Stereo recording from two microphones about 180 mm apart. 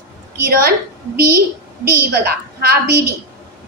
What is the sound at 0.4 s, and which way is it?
A woman's voice, 55° right (ahead or behind).